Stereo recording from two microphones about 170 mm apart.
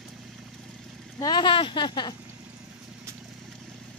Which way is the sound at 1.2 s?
25° left (ahead or behind).